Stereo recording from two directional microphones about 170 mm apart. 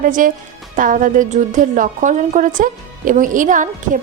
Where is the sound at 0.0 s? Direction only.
50° right (ahead or behind).